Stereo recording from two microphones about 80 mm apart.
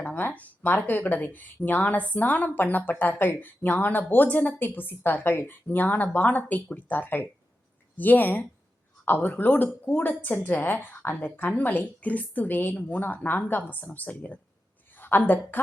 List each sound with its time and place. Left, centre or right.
0.0 s a woman's voice: left